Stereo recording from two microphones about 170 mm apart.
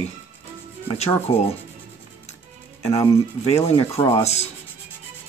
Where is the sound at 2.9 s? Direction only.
20° left (ahead or behind).